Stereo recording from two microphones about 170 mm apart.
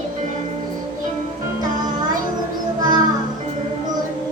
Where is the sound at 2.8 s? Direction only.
25° right (ahead or behind).